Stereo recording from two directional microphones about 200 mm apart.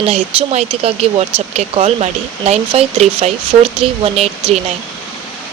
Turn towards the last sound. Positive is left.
turn(degrees=-25)  # may be behind; listen again after turning